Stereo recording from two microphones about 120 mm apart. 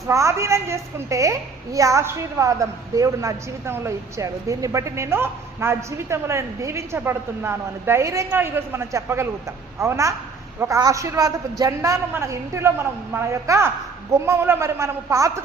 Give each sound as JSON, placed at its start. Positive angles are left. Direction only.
{"t": 0.1, "sound": "a woman's voice", "side_deg": -25}